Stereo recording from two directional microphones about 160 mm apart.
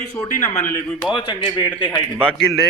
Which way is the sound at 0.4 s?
15° left (ahead or behind).